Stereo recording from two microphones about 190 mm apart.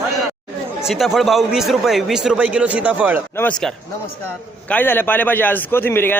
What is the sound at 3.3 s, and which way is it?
A man's voice, 5° left (ahead or behind).